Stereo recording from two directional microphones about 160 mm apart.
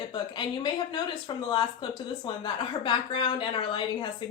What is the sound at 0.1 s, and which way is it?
A woman's voice, 30° left (ahead or behind).